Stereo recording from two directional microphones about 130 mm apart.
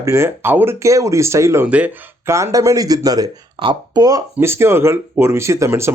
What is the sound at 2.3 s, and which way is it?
Speech, 20° right (ahead or behind).